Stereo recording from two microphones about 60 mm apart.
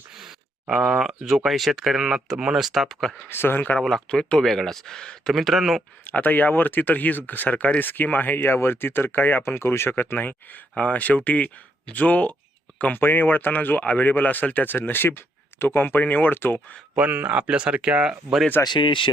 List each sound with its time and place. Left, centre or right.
0.2 s a sound: centre
1.5 s speech: centre
3.2 s speech: left
3.8 s speech: centre
5.3 s speech: centre
6.1 s speech: left
13.0 s speech: left
16.9 s speech: right
18.6 s speech: left